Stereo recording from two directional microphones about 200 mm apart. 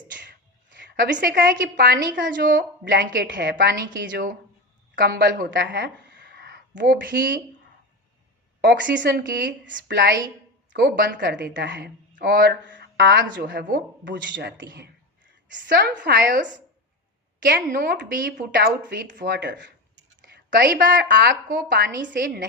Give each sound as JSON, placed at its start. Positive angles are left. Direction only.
{"t": 0.2, "sound": "a woman's voice", "side_deg": -60}
{"t": 4.1, "sound": "speech", "side_deg": -45}
{"t": 5.6, "sound": "a sound", "side_deg": -60}
{"t": 9.0, "sound": "speech", "side_deg": -50}
{"t": 12.6, "sound": "a sound", "side_deg": -65}
{"t": 13.3, "sound": "a woman's voice", "side_deg": -55}
{"t": 20.3, "sound": "speech", "side_deg": -50}
{"t": 21.9, "sound": "speech", "side_deg": -45}